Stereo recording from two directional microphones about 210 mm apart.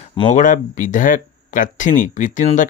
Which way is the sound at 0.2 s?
35° left (ahead or behind).